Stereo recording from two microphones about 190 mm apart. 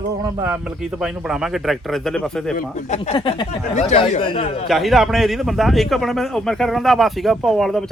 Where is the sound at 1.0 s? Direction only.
5° right (ahead or behind).